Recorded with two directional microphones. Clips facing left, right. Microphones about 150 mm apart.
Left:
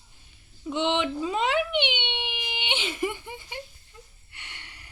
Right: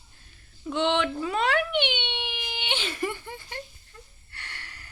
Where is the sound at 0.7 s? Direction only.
15° left (ahead or behind).